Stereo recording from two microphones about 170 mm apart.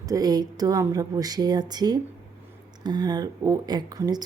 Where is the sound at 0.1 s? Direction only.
20° right (ahead or behind).